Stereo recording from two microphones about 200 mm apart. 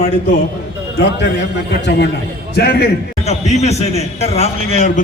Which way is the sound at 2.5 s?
50° left (ahead or behind).